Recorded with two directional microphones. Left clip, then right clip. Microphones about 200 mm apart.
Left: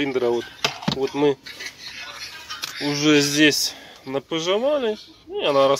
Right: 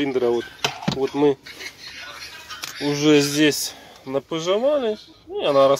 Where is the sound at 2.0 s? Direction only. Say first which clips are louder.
Left 1 dB; 50° left (ahead or behind).